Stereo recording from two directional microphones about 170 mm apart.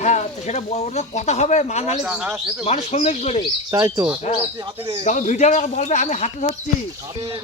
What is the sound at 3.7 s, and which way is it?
Speech, 20° right (ahead or behind).